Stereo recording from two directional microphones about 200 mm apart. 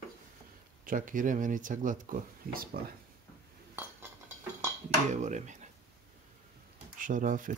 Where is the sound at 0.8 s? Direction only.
40° right (ahead or behind).